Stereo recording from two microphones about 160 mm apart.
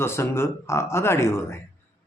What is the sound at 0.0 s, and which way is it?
A man's voice, 15° left (ahead or behind).